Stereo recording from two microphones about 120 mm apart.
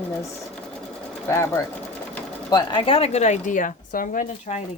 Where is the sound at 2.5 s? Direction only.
40° left (ahead or behind); by 3.7 s 90° left.